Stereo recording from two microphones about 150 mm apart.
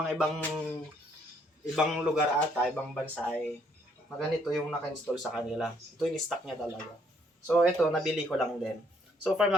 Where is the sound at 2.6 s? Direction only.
10° left (ahead or behind).